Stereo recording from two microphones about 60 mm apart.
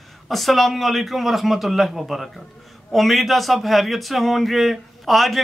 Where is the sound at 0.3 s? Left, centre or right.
Centre.